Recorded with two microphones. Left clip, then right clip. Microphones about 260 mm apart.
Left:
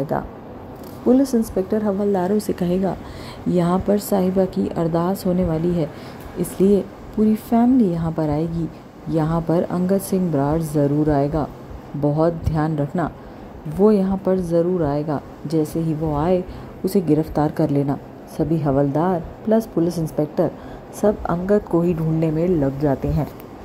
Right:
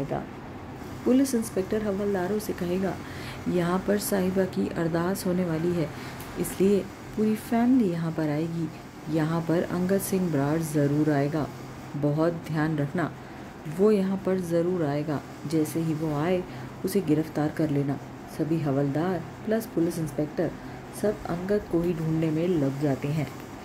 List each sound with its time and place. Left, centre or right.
1.1 s a woman's voice: centre
2.1 s a woman's voice: centre